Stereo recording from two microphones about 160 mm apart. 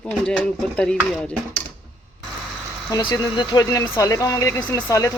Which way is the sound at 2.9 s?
25° left (ahead or behind).